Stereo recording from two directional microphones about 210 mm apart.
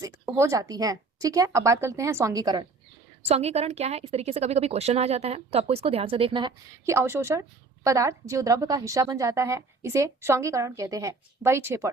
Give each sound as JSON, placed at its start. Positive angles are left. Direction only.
{"t": 0.0, "sound": "a woman's voice", "side_deg": -15}
{"t": 3.2, "sound": "a woman's voice", "side_deg": -30}